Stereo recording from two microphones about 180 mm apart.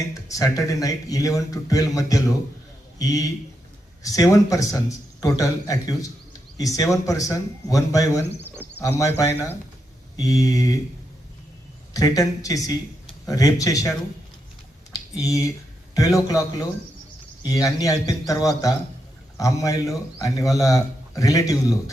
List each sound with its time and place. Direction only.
0.3 s a man's voice: 20° left (ahead or behind)
11.9 s a man's voice: 20° left (ahead or behind)
14.9 s a sound: 20° left (ahead or behind)
16.0 s a man's voice: 20° left (ahead or behind)